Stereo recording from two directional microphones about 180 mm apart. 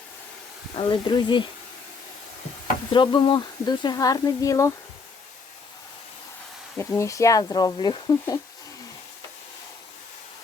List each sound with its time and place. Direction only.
0.8 s speech: 25° left (ahead or behind)
2.9 s speech: 25° left (ahead or behind)
6.7 s speech: 15° left (ahead or behind)